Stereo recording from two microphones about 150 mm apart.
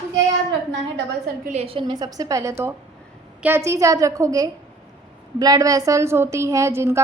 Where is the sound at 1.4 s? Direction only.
45° right (ahead or behind).